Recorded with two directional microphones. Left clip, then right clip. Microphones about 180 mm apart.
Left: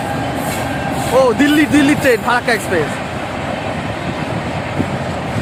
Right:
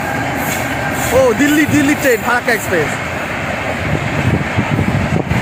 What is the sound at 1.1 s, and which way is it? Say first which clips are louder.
Speech: even; centre (ahead or behind).